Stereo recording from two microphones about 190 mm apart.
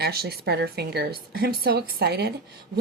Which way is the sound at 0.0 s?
55° right (ahead or behind).